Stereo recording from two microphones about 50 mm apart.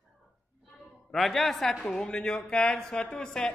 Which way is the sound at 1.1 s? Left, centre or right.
Centre.